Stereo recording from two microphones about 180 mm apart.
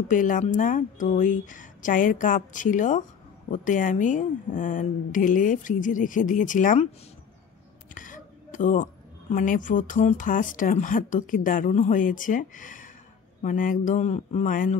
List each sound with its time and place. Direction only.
0.1 s speech: 45° left (ahead or behind)
7.9 s a sound: 45° left (ahead or behind)
9.3 s speech: 45° left (ahead or behind)